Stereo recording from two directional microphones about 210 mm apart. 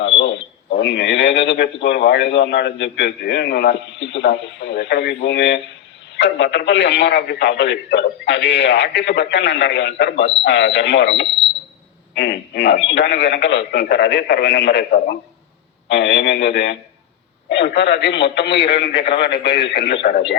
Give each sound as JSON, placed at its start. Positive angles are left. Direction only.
{"t": 0.0, "sound": "a man's voice", "side_deg": 55}